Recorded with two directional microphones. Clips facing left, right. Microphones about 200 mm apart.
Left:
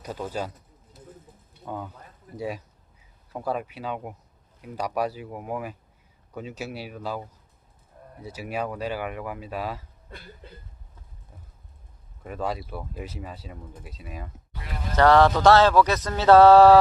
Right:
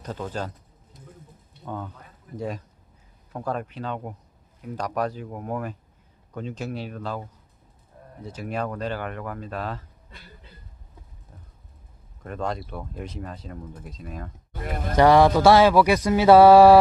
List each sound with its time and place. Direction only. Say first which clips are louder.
0.0 s speech: even; 10° left (ahead or behind)
1.6 s speech: right 1 dB; 10° left (ahead or behind)
12.2 s speech: even; 5° left (ahead or behind)
14.5 s speech: right 6 dB; 50° right (ahead or behind)
14.9 s speech: right 2 dB; 10° right (ahead or behind)